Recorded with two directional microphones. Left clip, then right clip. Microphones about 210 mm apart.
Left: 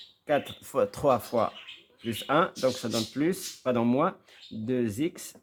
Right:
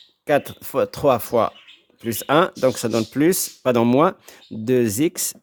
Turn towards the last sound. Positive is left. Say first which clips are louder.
# right 10 dB
turn(degrees=-50)  # may be behind; listen again after turning